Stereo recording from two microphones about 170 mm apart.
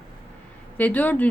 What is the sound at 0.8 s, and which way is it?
Speech, 10° left (ahead or behind).